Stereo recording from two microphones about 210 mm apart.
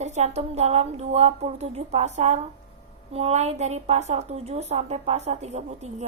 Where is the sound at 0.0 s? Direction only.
30° right (ahead or behind).